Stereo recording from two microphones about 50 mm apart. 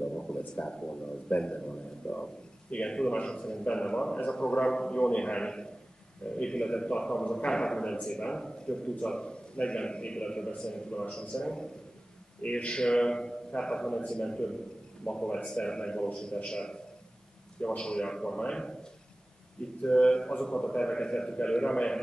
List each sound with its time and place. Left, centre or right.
0.0 s a sound: left
0.6 s a man's voice: centre
19.8 s a man's voice: centre